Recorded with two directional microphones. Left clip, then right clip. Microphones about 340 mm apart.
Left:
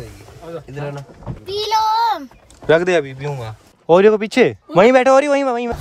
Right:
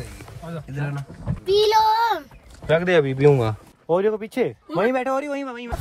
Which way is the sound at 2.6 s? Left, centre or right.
Centre.